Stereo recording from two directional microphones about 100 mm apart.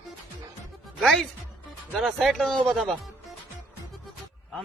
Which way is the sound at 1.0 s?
5° left (ahead or behind).